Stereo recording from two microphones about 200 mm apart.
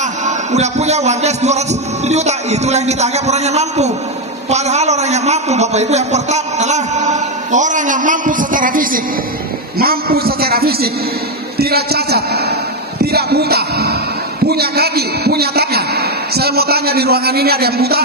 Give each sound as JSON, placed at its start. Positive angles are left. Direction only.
{"t": 0.2, "sound": "a man's voice", "side_deg": -35}